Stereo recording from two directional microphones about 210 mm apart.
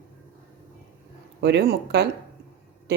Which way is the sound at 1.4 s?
55° right (ahead or behind).